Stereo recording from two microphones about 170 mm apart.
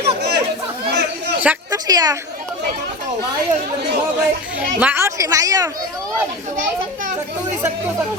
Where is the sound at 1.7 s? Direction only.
20° right (ahead or behind).